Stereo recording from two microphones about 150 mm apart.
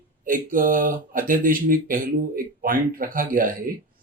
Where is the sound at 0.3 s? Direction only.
65° right (ahead or behind).